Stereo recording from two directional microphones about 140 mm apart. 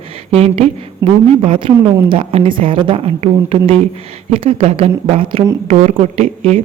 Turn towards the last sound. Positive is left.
turn(degrees=-45)  # may be behind; listen again after turning